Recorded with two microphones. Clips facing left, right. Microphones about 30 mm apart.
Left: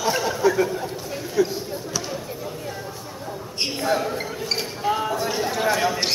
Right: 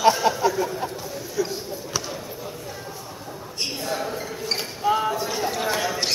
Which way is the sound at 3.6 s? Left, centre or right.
Left.